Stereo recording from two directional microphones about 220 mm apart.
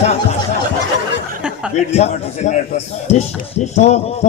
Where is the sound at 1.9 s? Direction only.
30° left (ahead or behind).